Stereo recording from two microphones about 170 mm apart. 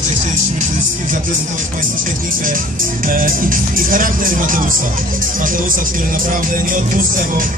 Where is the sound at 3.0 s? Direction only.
55° right (ahead or behind).